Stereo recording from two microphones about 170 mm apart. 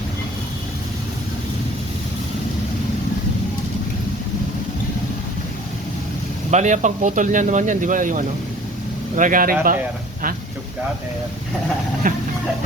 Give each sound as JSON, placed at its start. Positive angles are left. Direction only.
{"t": 6.5, "sound": "speech", "side_deg": -45}
{"t": 12.0, "sound": "speech", "side_deg": -50}